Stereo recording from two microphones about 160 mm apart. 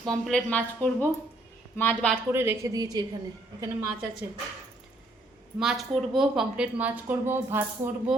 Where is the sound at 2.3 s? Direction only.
15° right (ahead or behind).